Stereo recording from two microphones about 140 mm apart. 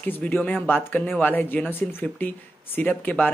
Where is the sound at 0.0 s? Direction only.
10° left (ahead or behind).